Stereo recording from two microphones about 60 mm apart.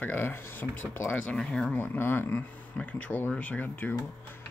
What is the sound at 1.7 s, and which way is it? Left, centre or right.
Speech, left.